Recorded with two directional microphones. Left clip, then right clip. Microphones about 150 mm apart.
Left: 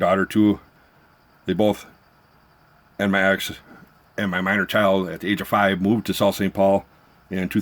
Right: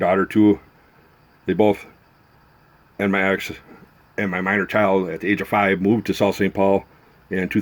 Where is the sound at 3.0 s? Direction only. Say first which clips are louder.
Even; 40° left (ahead or behind).